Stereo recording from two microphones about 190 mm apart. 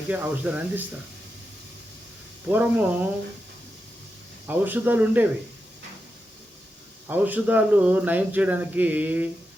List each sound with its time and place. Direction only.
0.1 s speech: 10° right (ahead or behind)
2.5 s speech: 10° right (ahead or behind)
4.4 s speech: 10° right (ahead or behind)
7.1 s speech: 10° right (ahead or behind)